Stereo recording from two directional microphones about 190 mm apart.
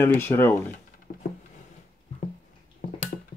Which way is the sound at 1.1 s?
45° left (ahead or behind).